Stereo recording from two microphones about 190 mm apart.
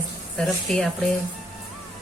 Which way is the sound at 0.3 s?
5° left (ahead or behind).